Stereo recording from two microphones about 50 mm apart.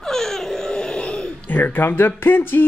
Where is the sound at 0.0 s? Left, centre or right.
Centre.